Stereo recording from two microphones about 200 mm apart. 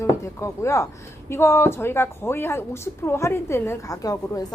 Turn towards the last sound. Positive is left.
turn(degrees=20)  # may be behind; listen again after turning